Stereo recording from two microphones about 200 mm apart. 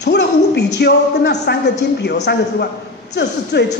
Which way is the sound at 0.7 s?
55° left (ahead or behind).